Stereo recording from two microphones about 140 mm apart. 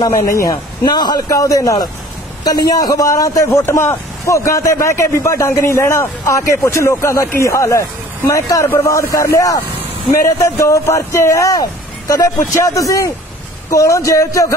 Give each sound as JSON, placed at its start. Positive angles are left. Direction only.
{"t": 0.5, "sound": "a man's voice", "side_deg": 30}